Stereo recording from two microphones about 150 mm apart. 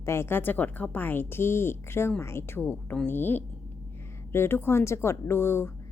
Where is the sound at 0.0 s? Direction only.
15° left (ahead or behind).